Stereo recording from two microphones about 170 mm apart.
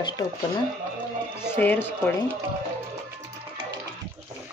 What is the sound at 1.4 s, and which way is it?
Speech, 10° left (ahead or behind).